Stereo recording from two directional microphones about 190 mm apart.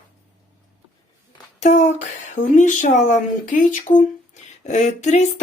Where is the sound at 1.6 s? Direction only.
35° left (ahead or behind).